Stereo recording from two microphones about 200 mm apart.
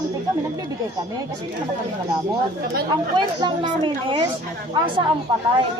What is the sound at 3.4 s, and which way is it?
Speech, 25° right (ahead or behind).